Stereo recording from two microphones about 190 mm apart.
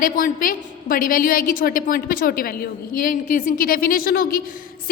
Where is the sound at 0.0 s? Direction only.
50° left (ahead or behind).